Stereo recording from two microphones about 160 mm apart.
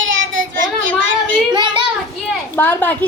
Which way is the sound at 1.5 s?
30° right (ahead or behind).